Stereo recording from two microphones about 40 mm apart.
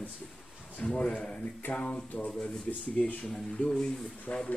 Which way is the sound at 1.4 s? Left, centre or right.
Left.